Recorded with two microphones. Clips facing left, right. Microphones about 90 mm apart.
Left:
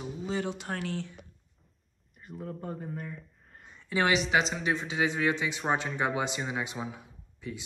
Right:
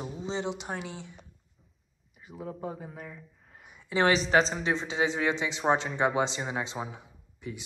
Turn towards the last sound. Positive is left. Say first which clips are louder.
# even
turn(degrees=-20)  # may be behind; listen again after turning